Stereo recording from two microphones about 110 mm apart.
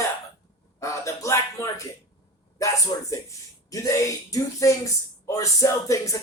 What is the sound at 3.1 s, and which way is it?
Speech, 30° left (ahead or behind).